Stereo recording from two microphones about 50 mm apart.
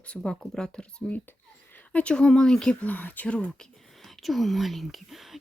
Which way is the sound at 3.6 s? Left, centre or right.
Centre.